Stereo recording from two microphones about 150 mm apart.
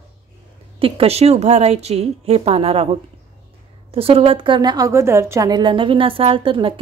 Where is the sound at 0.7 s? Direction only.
40° right (ahead or behind).